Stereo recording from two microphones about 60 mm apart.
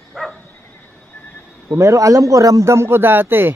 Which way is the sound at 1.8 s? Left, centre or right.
Right.